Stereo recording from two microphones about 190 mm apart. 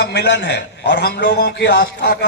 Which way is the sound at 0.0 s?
65° left (ahead or behind).